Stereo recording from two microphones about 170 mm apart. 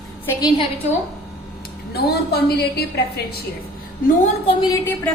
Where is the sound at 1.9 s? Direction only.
70° left (ahead or behind).